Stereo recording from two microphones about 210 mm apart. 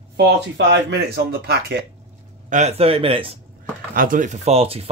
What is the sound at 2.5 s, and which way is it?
Speech, 30° right (ahead or behind).